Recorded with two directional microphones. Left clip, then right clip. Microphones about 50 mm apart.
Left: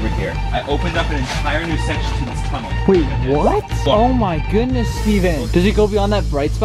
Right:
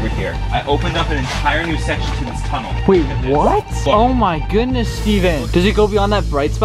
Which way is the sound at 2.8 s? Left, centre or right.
Centre.